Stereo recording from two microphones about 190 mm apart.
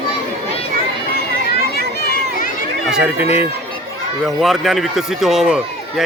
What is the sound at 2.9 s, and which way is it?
Speech, 10° right (ahead or behind).